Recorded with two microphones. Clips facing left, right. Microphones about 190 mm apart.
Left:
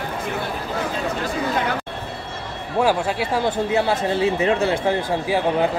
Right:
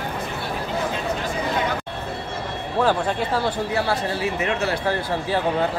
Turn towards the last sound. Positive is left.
turn(degrees=25)  # may be behind; listen again after turning